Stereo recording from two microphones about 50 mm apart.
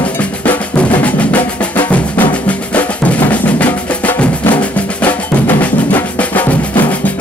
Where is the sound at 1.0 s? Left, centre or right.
Left.